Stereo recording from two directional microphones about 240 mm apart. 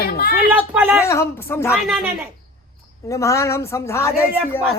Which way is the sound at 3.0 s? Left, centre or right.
Centre.